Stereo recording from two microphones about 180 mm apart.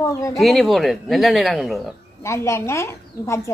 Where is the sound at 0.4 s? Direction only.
Centre (ahead or behind).